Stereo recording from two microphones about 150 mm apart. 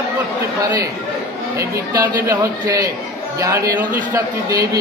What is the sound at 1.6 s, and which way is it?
A man's voice, 20° right (ahead or behind).